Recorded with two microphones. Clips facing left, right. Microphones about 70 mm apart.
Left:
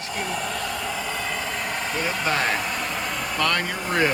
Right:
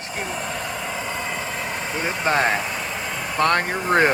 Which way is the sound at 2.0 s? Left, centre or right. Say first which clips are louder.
Right 5 dB; right.